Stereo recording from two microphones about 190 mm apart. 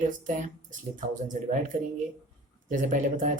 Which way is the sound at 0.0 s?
40° right (ahead or behind).